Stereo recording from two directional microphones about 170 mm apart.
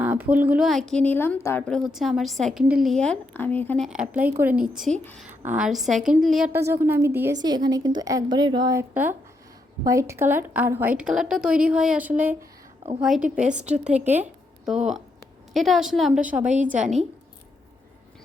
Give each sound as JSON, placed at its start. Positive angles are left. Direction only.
{"t": 0.0, "sound": "a woman's voice", "side_deg": -10}
{"t": 3.8, "sound": "a woman's voice", "side_deg": -5}
{"t": 6.5, "sound": "a woman's voice", "side_deg": -15}
{"t": 16.5, "sound": "a woman's voice", "side_deg": -45}
{"t": 16.7, "sound": "a woman's voice", "side_deg": -5}